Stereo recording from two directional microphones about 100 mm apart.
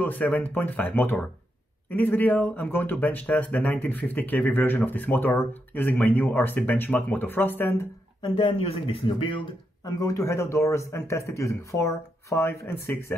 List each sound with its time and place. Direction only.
0.0 s speech: 15° left (ahead or behind)
8.2 s speech: 55° left (ahead or behind)
9.8 s a man's voice: 35° left (ahead or behind)